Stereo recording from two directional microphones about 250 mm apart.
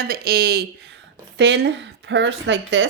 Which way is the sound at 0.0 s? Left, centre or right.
Right.